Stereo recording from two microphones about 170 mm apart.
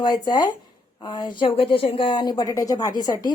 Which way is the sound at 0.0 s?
25° left (ahead or behind).